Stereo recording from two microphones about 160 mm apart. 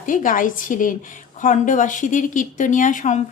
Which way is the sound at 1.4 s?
55° left (ahead or behind).